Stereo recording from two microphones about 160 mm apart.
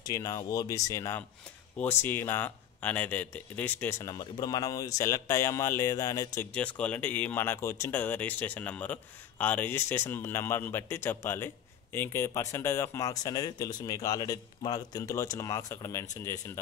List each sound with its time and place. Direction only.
0.0 s speech: 20° left (ahead or behind)
4.1 s speech: 25° left (ahead or behind)
6.5 s speech: 10° left (ahead or behind)